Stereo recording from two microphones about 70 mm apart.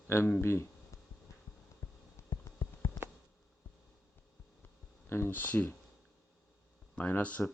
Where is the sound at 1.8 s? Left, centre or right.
Left.